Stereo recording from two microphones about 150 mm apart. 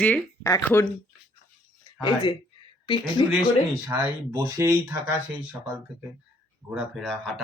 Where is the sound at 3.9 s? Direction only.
20° right (ahead or behind).